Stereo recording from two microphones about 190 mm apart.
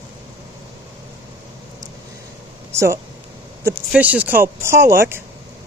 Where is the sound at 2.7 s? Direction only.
15° right (ahead or behind).